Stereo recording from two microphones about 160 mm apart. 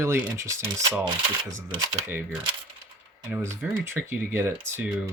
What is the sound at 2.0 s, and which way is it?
Speech, 10° right (ahead or behind).